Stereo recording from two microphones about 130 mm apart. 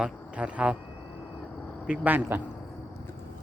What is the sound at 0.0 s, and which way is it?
Speech, 10° right (ahead or behind).